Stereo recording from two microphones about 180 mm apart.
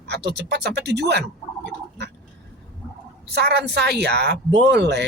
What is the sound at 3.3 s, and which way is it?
Speech, 70° right (ahead or behind).